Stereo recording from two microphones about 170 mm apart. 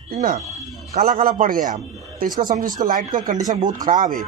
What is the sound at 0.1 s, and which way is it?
A man's voice, 55° right (ahead or behind).